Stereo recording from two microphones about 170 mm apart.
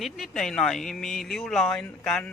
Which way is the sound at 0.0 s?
Centre (ahead or behind).